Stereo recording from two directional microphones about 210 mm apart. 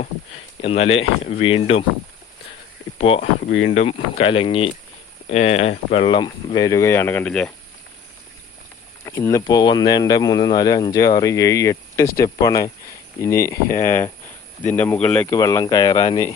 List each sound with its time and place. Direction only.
0.6 s speech: 30° left (ahead or behind)
3.0 s speech: 30° left (ahead or behind); by 7.5 s 5° left (ahead or behind)
9.0 s speech: 15° left (ahead or behind)
15.3 s speech: 15° left (ahead or behind)